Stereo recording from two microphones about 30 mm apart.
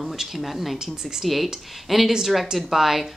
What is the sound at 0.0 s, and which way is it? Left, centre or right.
Speech, centre.